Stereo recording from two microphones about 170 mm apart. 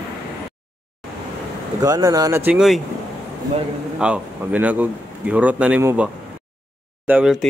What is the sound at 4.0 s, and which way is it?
Speech, 5° right (ahead or behind).